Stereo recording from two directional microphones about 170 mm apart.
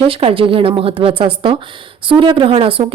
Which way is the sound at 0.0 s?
35° right (ahead or behind).